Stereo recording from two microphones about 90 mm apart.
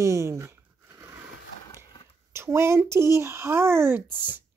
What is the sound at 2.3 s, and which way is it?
Speech, 30° right (ahead or behind).